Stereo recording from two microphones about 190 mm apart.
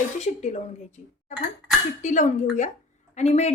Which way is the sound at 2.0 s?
40° left (ahead or behind).